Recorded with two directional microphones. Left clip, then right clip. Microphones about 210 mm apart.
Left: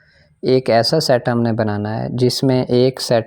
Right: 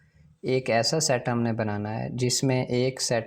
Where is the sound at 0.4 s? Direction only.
40° left (ahead or behind).